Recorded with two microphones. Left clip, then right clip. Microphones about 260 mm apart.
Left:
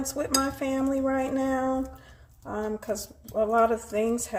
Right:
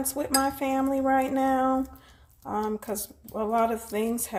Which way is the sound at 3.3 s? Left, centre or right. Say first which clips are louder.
Left 3 dB; right.